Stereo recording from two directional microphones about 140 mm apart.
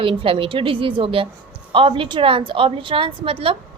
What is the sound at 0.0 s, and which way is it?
A woman's voice, 40° right (ahead or behind).